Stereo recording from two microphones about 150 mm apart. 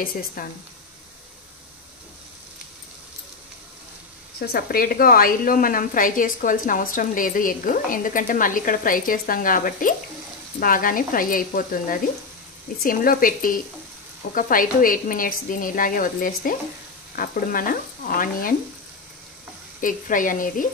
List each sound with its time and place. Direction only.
0.4 s speech: 70° left (ahead or behind)
4.4 s a woman's voice: 90° left; by 18.5 s 70° left (ahead or behind)
19.8 s a woman's voice: 60° left (ahead or behind)